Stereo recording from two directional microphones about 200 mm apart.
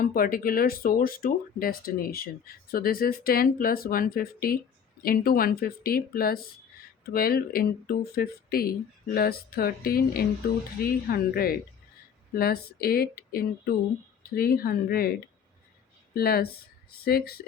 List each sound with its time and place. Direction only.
0.0 s speech: 45° left (ahead or behind)
16.1 s speech: 50° left (ahead or behind)